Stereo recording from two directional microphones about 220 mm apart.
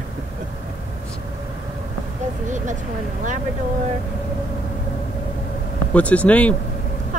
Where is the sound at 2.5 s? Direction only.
35° right (ahead or behind).